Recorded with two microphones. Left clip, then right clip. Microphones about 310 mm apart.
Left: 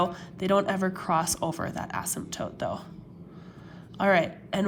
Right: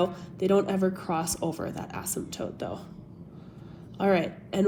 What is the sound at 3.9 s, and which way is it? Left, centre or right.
Speech, left.